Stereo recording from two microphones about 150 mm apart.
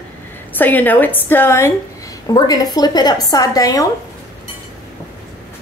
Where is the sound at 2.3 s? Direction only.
25° left (ahead or behind).